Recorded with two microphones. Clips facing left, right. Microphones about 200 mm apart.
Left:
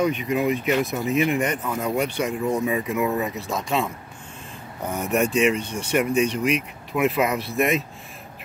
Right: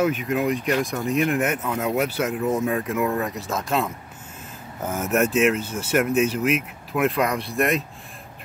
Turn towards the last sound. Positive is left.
turn(degrees=0)  # may be behind; listen again after turning